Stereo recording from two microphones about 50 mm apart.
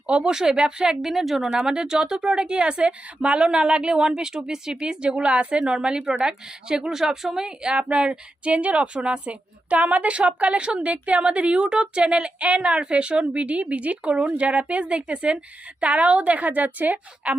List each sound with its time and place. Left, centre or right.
0.1 s speech: centre
1.1 s speech: centre
1.5 s a woman's voice: centre; by 17.3 s right